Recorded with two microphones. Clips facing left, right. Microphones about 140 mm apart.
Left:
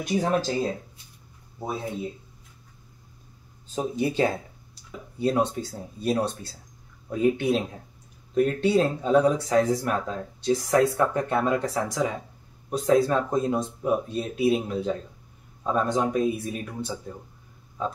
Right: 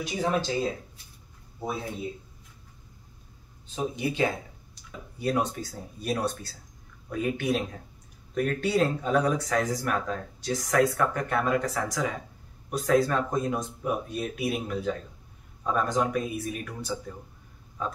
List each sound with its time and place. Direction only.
0.0 s speech: 45° left (ahead or behind)
3.7 s speech: 35° left (ahead or behind)